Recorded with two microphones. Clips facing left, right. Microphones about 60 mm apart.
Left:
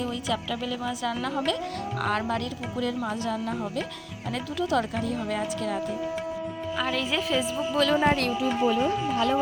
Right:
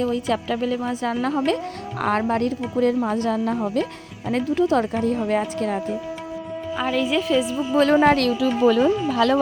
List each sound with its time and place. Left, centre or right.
0.0 s a woman's voice: right
6.7 s a woman's voice: centre
7.7 s a woman's voice: right
8.0 s a woman's voice: right
8.6 s speech: right